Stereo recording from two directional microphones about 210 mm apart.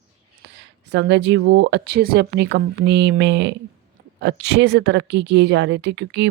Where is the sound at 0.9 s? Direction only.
55° right (ahead or behind).